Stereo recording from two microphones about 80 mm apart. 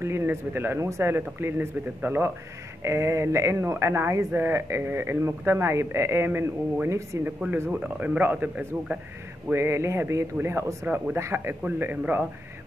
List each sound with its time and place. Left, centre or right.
0.0 s speech: right
9.5 s speech: right
11.6 s speech: centre